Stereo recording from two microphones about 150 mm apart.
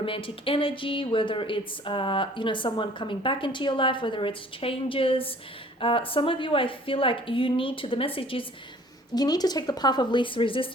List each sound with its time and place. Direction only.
0.0 s speech: 35° left (ahead or behind)
9.1 s a woman's voice: 25° left (ahead or behind)